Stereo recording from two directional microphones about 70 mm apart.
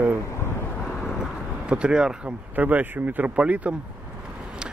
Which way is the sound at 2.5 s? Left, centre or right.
Right.